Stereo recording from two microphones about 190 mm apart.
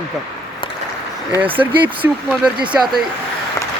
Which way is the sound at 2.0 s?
15° right (ahead or behind).